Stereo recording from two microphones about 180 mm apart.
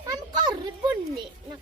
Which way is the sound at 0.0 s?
20° right (ahead or behind).